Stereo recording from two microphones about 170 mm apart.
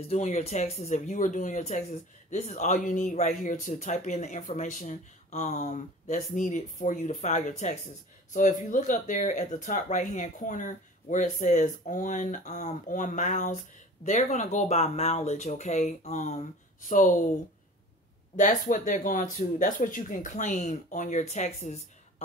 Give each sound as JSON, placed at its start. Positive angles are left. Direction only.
{"t": 0.1, "sound": "speech", "side_deg": 40}
{"t": 18.3, "sound": "speech", "side_deg": 50}